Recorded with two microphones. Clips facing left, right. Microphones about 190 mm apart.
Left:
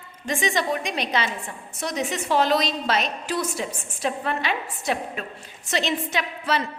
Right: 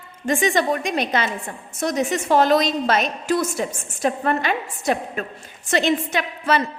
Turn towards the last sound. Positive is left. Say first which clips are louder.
# right 4 dB
turn(degrees=-50)  # may be behind; listen again after turning